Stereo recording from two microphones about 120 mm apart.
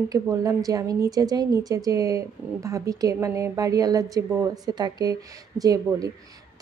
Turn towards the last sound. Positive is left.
turn(degrees=-30)  # may be behind; listen again after turning